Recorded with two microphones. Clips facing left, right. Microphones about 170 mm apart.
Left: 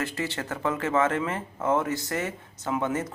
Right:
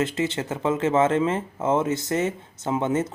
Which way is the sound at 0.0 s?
20° right (ahead or behind).